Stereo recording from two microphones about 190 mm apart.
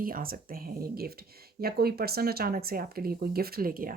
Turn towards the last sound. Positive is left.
turn(degrees=-50)  # may be behind; listen again after turning